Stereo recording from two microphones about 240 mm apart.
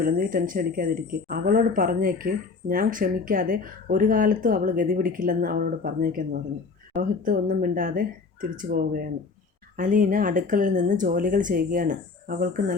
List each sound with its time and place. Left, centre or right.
0.0 s speech: right